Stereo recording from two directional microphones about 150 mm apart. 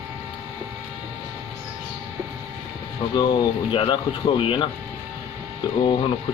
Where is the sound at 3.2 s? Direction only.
35° left (ahead or behind).